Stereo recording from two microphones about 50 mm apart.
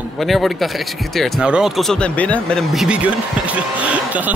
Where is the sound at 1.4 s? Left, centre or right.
Centre.